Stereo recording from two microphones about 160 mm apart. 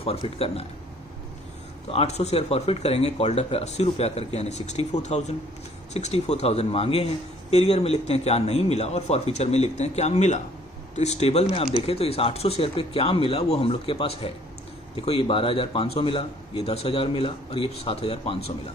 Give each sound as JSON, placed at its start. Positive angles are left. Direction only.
{"t": 0.0, "sound": "a man's voice", "side_deg": 35}
{"t": 1.9, "sound": "a man's voice", "side_deg": 40}